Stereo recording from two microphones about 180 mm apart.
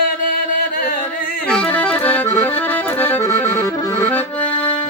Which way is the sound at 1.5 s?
5° left (ahead or behind).